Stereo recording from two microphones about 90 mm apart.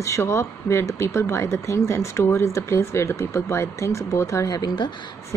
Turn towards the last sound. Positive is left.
turn(degrees=60)  # may be behind; listen again after turning